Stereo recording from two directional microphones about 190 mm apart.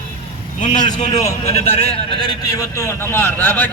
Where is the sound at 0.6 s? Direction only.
40° left (ahead or behind).